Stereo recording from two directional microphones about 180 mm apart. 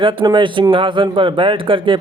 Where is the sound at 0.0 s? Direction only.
25° right (ahead or behind).